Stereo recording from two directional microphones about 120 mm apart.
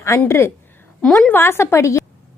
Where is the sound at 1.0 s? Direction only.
5° left (ahead or behind).